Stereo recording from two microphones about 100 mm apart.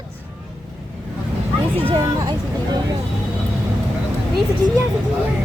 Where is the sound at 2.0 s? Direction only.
40° right (ahead or behind).